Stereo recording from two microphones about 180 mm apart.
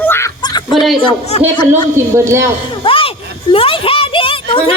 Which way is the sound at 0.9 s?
30° left (ahead or behind).